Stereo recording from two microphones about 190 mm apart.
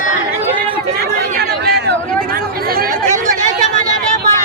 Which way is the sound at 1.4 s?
60° right (ahead or behind).